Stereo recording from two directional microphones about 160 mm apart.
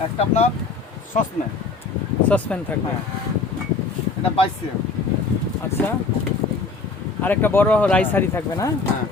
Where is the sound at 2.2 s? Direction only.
10° left (ahead or behind).